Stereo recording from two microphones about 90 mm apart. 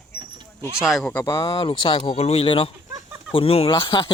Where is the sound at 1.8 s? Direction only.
65° left (ahead or behind); by 3.7 s 90° left.